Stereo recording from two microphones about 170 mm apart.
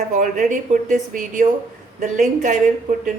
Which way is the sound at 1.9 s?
50° right (ahead or behind).